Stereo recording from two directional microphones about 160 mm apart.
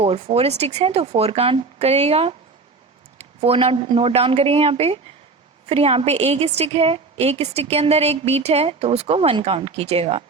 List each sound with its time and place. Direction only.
0.0 s a woman's voice: 40° right (ahead or behind)